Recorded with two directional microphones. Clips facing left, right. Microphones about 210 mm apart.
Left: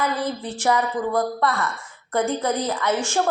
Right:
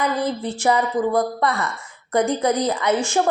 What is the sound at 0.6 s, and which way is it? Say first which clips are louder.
A woman's voice: right 2 dB; 10° right (ahead or behind).